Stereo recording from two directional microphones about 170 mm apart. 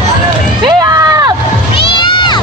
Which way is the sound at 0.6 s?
20° right (ahead or behind).